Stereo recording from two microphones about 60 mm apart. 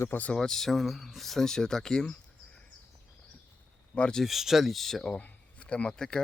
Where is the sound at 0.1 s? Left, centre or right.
Left.